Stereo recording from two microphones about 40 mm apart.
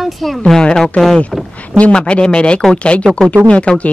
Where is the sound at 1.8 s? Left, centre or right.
Left.